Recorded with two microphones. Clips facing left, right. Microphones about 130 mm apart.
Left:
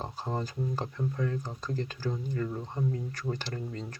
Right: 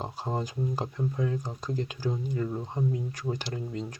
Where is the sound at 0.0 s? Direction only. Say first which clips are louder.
Right 2 dB; 15° right (ahead or behind).